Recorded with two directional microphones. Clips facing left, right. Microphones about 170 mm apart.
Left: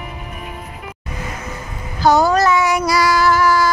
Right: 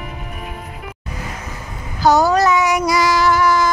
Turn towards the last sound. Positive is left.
turn(degrees=-20)  # may be behind; listen again after turning